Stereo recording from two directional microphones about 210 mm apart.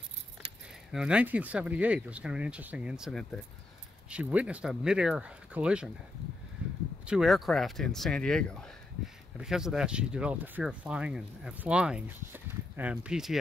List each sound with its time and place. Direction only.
0.4 s keys jangling: 25° right (ahead or behind)
0.9 s speech: 5° right (ahead or behind)
7.1 s speech: centre (ahead or behind)